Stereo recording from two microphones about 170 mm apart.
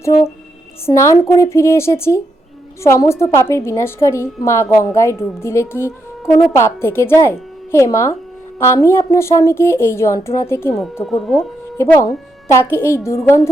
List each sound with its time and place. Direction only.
0.9 s a woman's voice: 15° left (ahead or behind)
11.0 s speech: centre (ahead or behind)
11.8 s a woman's voice: 20° left (ahead or behind)